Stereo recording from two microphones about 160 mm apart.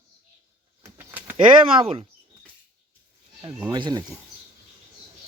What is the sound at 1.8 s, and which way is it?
Speech, 35° right (ahead or behind).